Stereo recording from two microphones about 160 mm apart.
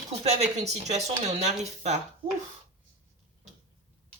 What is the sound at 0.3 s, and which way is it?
Speech, 45° right (ahead or behind).